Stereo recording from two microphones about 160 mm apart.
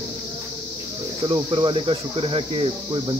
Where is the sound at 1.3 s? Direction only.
30° right (ahead or behind).